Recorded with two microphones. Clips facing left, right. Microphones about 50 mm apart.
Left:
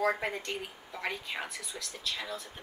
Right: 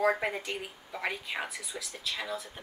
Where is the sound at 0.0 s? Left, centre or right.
Centre.